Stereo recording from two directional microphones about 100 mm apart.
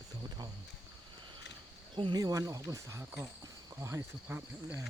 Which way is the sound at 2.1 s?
35° right (ahead or behind).